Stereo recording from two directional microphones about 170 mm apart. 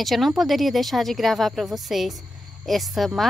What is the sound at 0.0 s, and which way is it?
A woman's voice, centre (ahead or behind).